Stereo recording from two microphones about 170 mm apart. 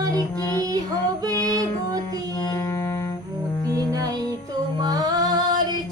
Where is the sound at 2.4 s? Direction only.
20° left (ahead or behind).